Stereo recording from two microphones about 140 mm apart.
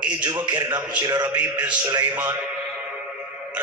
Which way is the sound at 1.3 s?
10° right (ahead or behind).